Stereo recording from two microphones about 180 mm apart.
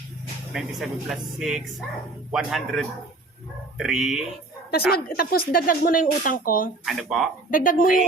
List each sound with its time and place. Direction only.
0.5 s speech: centre (ahead or behind)
4.9 s speech: 60° left (ahead or behind)
6.8 s speech: centre (ahead or behind)
7.5 s speech: 50° left (ahead or behind)